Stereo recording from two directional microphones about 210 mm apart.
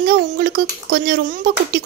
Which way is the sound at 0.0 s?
45° right (ahead or behind).